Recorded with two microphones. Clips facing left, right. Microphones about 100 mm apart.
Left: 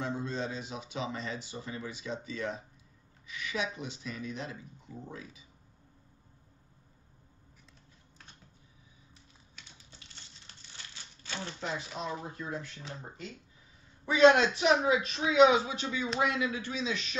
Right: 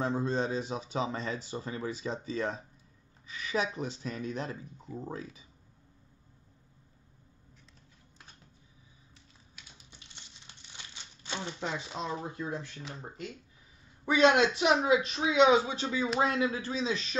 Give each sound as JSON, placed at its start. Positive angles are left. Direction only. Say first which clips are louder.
{"t": 0.0, "sound": "speech", "louder": "right 5 dB", "side_deg": -35}
{"t": 9.6, "sound": "crumpling", "louder": "even", "side_deg": -15}
{"t": 14.2, "sound": "speech", "louder": "left 2 dB", "side_deg": -20}